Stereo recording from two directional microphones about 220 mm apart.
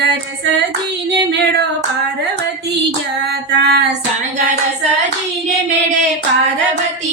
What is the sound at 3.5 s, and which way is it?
Female singing, 50° right (ahead or behind).